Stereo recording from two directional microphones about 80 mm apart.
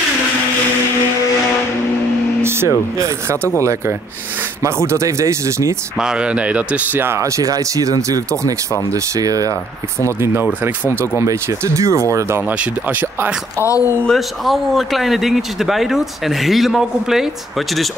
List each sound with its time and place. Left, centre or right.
2.4 s a sound: right
4.6 s speech: right
5.9 s speech: centre
7.0 s speech: right
10.2 s speech: right
12.4 s speech: right
13.6 s speech: left
14.0 s speech: centre